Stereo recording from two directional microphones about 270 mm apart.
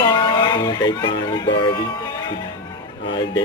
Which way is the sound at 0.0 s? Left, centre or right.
Centre.